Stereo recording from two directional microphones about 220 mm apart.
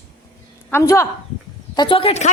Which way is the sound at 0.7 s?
10° left (ahead or behind).